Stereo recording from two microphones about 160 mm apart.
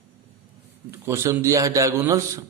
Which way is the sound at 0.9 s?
15° right (ahead or behind).